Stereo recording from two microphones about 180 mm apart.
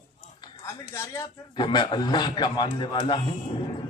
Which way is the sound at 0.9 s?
15° left (ahead or behind).